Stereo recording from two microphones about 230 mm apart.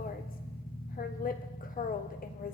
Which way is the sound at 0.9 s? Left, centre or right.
Left.